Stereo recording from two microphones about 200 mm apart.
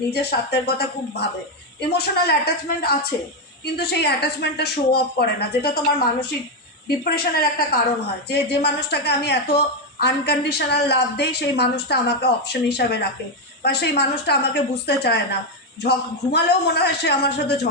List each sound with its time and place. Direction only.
0.1 s a woman's voice: 55° left (ahead or behind)